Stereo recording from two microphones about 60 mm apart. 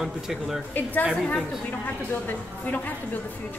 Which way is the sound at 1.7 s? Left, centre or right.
Left.